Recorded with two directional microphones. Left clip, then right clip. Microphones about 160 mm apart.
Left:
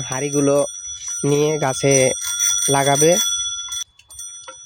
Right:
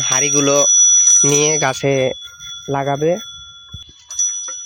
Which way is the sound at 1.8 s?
20° left (ahead or behind).